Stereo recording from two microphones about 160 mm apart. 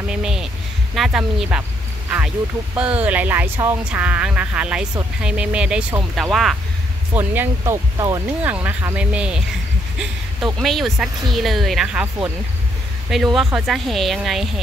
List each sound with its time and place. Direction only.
0.1 s a sound: 5° right (ahead or behind)
0.9 s speech: centre (ahead or behind)
7.2 s speech: 15° right (ahead or behind)
8.5 s speech: 10° right (ahead or behind)